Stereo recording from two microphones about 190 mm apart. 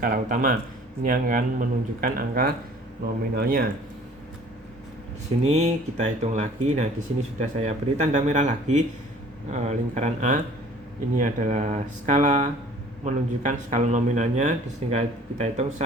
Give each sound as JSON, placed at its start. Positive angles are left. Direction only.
{"t": 0.0, "sound": "speech", "side_deg": -45}
{"t": 5.5, "sound": "speech", "side_deg": -35}